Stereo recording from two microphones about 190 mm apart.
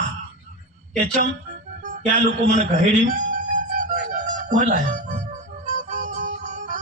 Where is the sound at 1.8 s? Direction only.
40° right (ahead or behind).